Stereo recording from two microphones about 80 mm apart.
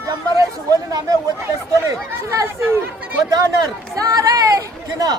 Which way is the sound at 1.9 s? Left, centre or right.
Right.